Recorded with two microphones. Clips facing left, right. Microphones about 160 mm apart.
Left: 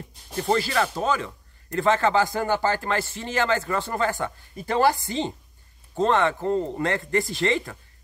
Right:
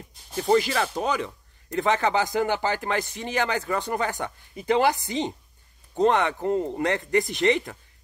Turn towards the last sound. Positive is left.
turn(degrees=-20)  # may be behind; listen again after turning